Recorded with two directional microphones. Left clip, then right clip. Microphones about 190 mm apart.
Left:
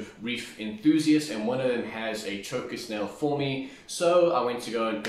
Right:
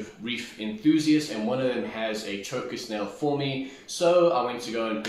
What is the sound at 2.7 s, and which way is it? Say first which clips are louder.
Speech: right 1 dB; 10° left (ahead or behind).